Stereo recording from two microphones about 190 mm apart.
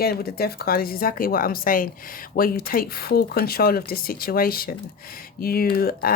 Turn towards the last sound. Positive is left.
turn(degrees=55)  # may be behind; listen again after turning